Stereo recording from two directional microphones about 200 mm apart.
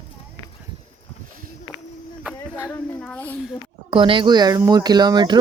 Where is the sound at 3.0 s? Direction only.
10° left (ahead or behind).